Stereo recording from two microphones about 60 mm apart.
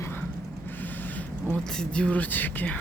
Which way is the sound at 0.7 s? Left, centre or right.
Left.